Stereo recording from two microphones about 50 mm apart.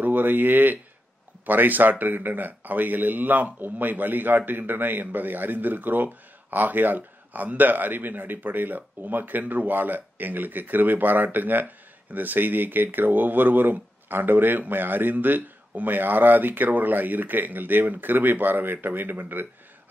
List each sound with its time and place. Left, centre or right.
0.0 s speech: right